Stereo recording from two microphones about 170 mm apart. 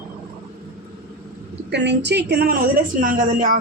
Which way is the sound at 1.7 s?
90° right.